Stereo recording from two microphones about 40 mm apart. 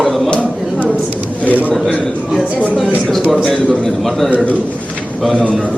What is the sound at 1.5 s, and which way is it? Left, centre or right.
Speech, right.